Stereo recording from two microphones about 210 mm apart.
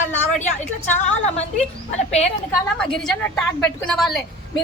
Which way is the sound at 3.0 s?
5° left (ahead or behind).